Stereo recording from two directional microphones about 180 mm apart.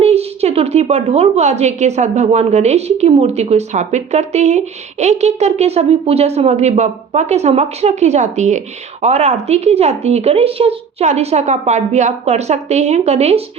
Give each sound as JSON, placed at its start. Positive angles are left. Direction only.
{"t": 0.0, "sound": "a woman's voice", "side_deg": -35}